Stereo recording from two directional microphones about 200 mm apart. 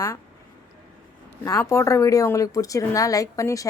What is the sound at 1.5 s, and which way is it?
Speech, 15° left (ahead or behind).